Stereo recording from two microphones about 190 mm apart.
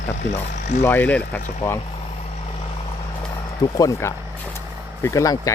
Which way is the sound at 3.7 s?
15° left (ahead or behind).